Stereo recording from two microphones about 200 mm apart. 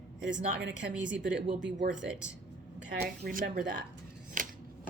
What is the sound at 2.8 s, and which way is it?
Speech, 55° right (ahead or behind).